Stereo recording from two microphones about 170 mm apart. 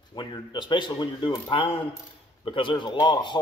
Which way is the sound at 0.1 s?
25° left (ahead or behind).